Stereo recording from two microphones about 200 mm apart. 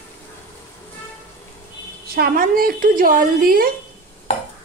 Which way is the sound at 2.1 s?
50° right (ahead or behind).